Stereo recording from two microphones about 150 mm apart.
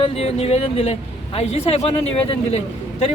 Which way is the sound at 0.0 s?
40° left (ahead or behind).